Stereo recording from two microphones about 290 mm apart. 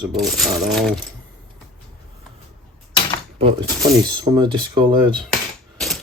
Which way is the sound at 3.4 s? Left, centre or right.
Centre.